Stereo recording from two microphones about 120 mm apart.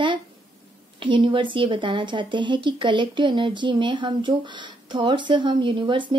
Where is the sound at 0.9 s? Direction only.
45° right (ahead or behind).